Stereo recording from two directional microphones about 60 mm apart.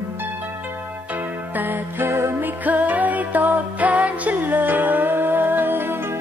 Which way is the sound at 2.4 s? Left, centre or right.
Right.